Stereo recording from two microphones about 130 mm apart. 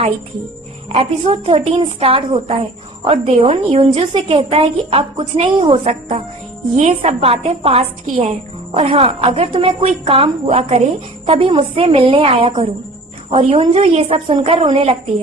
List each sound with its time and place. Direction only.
0.9 s a woman's voice: 45° right (ahead or behind)
13.4 s a woman's voice: 55° right (ahead or behind)